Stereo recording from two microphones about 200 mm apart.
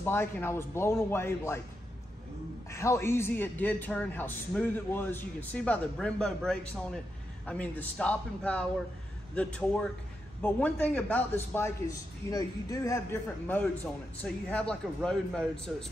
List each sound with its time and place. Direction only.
0.0 s a man's voice: 10° left (ahead or behind)
2.7 s a man's voice: 15° left (ahead or behind)
14.2 s a man's voice: 5° left (ahead or behind)